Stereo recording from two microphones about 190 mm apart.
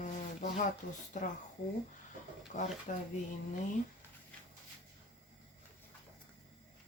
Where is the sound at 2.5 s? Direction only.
40° left (ahead or behind).